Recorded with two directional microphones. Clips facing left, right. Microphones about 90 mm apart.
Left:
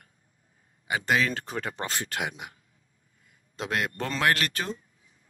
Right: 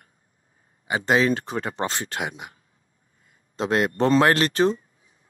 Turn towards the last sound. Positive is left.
turn(degrees=-30)  # may be behind; listen again after turning